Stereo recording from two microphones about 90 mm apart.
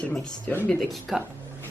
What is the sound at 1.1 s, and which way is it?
Speech, 5° right (ahead or behind).